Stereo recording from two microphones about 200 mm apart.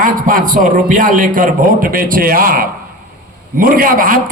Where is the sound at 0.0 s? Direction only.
45° right (ahead or behind).